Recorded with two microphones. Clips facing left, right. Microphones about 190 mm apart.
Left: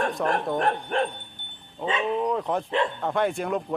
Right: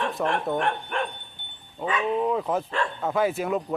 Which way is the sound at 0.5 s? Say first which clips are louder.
Left 2 dB; 35° left (ahead or behind).